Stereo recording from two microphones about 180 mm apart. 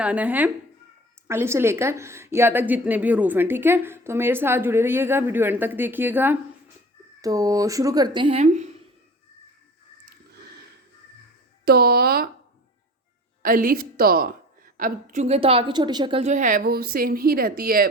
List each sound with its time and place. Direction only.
0.0 s a woman's voice: 10° right (ahead or behind); by 8.6 s 35° right (ahead or behind)
10.1 s a sound: 65° right (ahead or behind)
11.6 s speech: 60° right (ahead or behind)
13.4 s a woman's voice: 50° right (ahead or behind)